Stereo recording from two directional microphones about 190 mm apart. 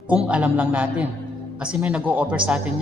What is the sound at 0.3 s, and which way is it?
A man's voice, 5° right (ahead or behind).